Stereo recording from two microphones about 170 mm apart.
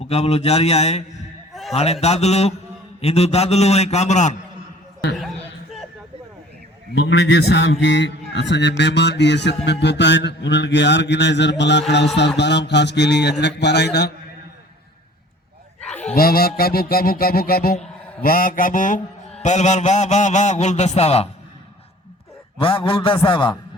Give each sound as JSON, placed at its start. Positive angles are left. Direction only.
{"t": 0.0, "sound": "a man's voice", "side_deg": 40}
{"t": 6.9, "sound": "a man's voice", "side_deg": 90}
{"t": 16.1, "sound": "music", "side_deg": 60}
{"t": 19.4, "sound": "a man's voice", "side_deg": 45}
{"t": 22.5, "sound": "a man's voice", "side_deg": 30}